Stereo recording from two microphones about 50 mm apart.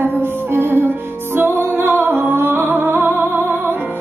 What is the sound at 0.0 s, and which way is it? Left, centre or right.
Music, right.